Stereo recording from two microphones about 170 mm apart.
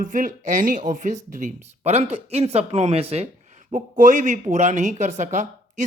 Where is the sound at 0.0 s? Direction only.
50° right (ahead or behind).